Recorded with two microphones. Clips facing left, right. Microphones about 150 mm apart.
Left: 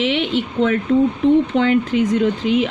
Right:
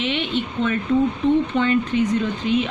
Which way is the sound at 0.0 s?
90° left.